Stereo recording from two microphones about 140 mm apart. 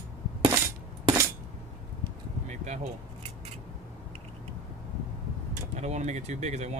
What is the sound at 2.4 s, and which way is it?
Vehicle, 55° right (ahead or behind).